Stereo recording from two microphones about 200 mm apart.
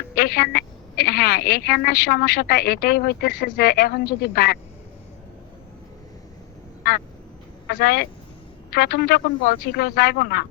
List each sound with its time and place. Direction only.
0.2 s a woman's voice: 50° left (ahead or behind)
7.8 s a woman's voice: 50° left (ahead or behind)